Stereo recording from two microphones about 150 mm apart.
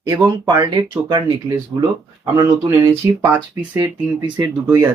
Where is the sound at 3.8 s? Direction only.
30° right (ahead or behind).